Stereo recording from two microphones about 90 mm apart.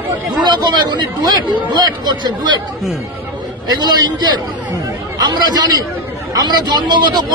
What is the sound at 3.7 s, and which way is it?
Speech, 50° right (ahead or behind).